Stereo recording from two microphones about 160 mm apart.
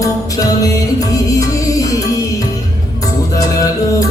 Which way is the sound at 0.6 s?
20° left (ahead or behind).